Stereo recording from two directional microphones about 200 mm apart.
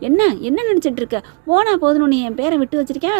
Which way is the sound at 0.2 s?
30° right (ahead or behind).